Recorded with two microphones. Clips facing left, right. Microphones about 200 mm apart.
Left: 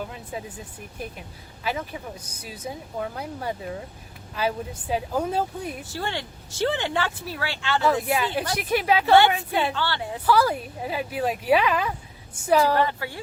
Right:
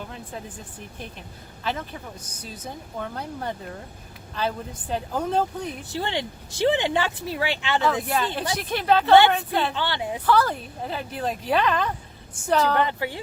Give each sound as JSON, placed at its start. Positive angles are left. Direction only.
{"t": 0.1, "sound": "speech", "side_deg": 5}
{"t": 1.6, "sound": "speech", "side_deg": 10}
{"t": 5.9, "sound": "speech", "side_deg": -20}
{"t": 8.1, "sound": "speech", "side_deg": 10}
{"t": 9.7, "sound": "speech", "side_deg": -15}
{"t": 10.2, "sound": "speech", "side_deg": 10}
{"t": 12.8, "sound": "speech", "side_deg": -20}